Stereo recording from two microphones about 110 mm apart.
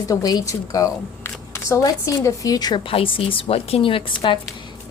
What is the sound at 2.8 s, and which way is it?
A woman's voice, 55° left (ahead or behind).